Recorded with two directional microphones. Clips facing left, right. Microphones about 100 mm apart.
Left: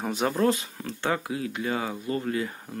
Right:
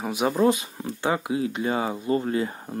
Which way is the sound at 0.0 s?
10° right (ahead or behind).